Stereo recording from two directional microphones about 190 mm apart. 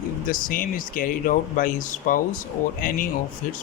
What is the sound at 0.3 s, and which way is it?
Speech, 45° left (ahead or behind).